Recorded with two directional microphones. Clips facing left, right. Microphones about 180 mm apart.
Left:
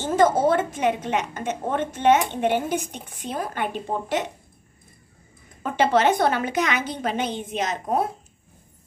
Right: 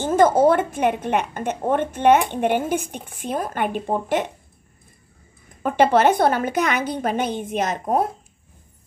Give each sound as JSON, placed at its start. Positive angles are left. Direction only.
{"t": 0.0, "sound": "a woman's voice", "side_deg": -50}
{"t": 5.6, "sound": "a woman's voice", "side_deg": -50}